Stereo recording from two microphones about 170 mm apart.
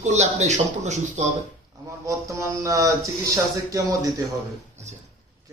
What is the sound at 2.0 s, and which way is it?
Speech, 20° right (ahead or behind).